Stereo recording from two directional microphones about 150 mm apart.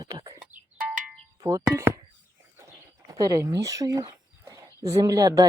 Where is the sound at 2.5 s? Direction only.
20° right (ahead or behind).